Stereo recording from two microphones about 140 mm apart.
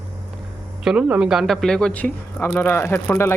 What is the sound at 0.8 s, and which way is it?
A man's voice, 5° right (ahead or behind).